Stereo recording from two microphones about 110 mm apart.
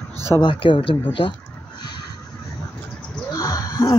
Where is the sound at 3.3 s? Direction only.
30° left (ahead or behind).